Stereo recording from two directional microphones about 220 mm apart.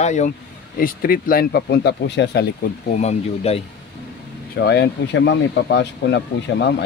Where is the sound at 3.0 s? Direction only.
30° left (ahead or behind).